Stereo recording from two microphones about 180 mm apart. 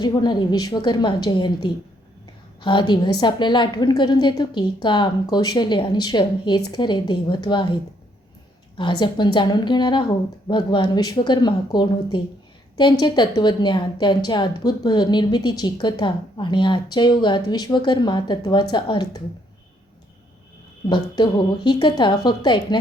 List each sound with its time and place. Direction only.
0.0 s a woman's voice: 25° left (ahead or behind)
8.8 s a woman's voice: 25° left (ahead or behind)
20.9 s a woman's voice: 25° left (ahead or behind)